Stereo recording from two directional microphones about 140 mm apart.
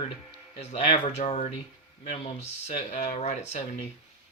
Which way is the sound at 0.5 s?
45° left (ahead or behind).